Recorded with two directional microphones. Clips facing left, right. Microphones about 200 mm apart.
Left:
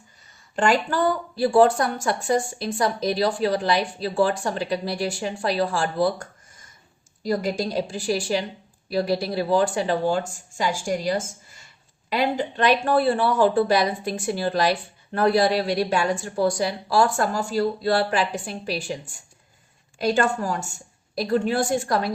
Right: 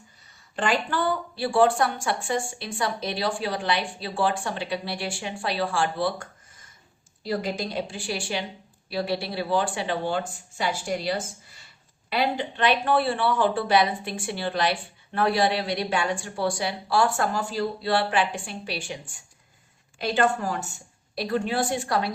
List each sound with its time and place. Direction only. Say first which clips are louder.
0.5 s speech: left 4 dB; 45° left (ahead or behind)